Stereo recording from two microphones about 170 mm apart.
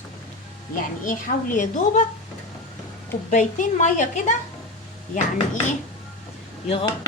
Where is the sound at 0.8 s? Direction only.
50° left (ahead or behind).